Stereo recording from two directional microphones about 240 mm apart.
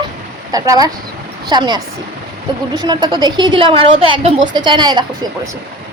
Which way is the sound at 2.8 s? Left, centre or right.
Centre.